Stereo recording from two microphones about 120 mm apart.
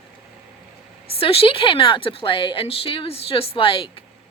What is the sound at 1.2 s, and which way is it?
Speech, 50° left (ahead or behind).